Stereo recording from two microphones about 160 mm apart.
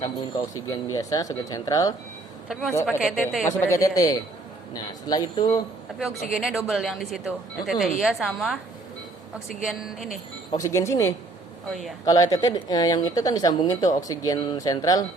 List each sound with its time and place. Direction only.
0.5 s speech: 20° left (ahead or behind)
2.5 s speech: centre (ahead or behind)
3.4 s speech: 20° left (ahead or behind)
6.3 s speech: centre (ahead or behind)
10.5 s speech: 20° left (ahead or behind)
11.7 s speech: centre (ahead or behind)
12.0 s speech: 20° left (ahead or behind)